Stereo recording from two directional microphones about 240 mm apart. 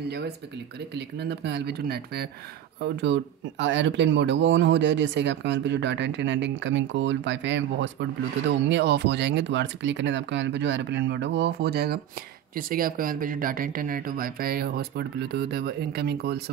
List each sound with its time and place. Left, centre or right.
0.7 s speech: right